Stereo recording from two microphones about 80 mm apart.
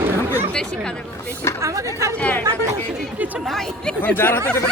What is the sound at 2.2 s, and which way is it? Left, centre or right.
Speech, centre.